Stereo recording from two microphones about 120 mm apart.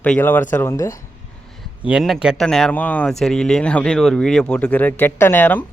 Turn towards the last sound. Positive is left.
turn(degrees=15)  # may be behind; listen again after turning